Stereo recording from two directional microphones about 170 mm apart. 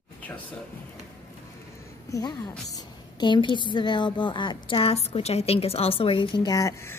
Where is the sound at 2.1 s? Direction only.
20° left (ahead or behind).